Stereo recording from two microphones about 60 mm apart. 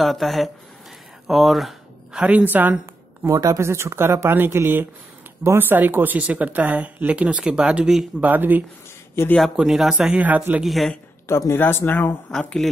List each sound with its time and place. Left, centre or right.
0.0 s speech: centre
2.1 s speech: right
3.3 s speech: right; by 7.9 s centre
8.2 s speech: right
9.2 s speech: left
9.6 s speech: centre
10.1 s speech: right
10.6 s speech: centre
11.2 s speech: left
11.5 s speech: left
12.3 s a woman's voice: centre